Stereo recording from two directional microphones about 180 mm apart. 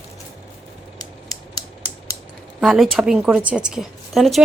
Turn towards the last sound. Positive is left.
turn(degrees=0)  # may be behind; listen again after turning